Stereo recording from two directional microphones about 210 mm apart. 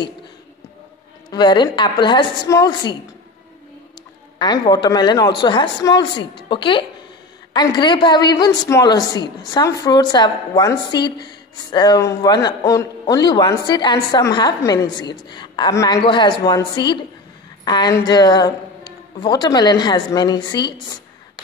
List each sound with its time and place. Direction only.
1.3 s a woman's voice: 20° left (ahead or behind)
4.4 s a woman's voice: 20° left (ahead or behind)